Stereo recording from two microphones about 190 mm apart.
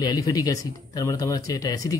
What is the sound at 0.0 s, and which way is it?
Speech, 20° left (ahead or behind).